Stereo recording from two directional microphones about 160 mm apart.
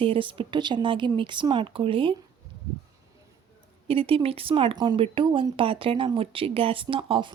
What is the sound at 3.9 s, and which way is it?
A woman's voice, 35° right (ahead or behind).